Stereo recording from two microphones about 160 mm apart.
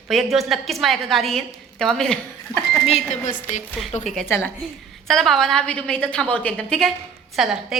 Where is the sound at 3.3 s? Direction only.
50° left (ahead or behind).